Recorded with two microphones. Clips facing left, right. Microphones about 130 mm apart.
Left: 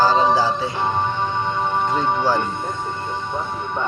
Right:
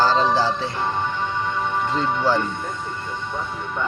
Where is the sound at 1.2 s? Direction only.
30° left (ahead or behind).